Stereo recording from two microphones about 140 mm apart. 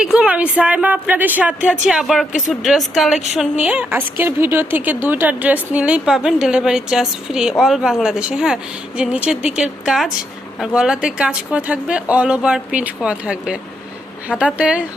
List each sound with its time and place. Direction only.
0.0 s a woman's voice: 5° right (ahead or behind)